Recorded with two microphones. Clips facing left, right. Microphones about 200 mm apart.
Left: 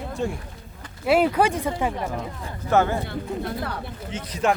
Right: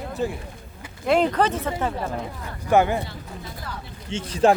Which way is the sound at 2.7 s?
15° right (ahead or behind).